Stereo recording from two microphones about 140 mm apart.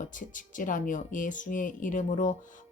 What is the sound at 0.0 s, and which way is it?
Speech, 70° left (ahead or behind).